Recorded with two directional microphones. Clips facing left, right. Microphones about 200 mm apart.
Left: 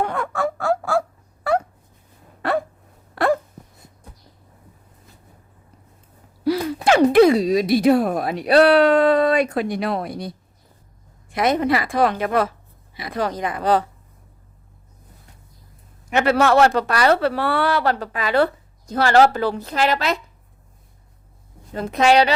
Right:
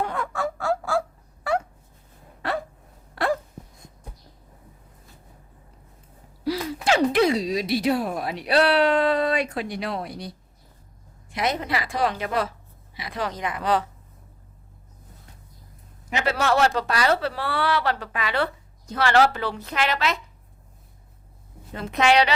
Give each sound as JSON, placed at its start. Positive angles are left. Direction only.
{"t": 0.0, "sound": "fowl", "side_deg": 65}
{"t": 2.4, "sound": "a sound", "side_deg": 55}
{"t": 6.8, "sound": "speech", "side_deg": 55}
{"t": 16.1, "sound": "a woman's voice", "side_deg": 55}
{"t": 21.8, "sound": "a woman's voice", "side_deg": 40}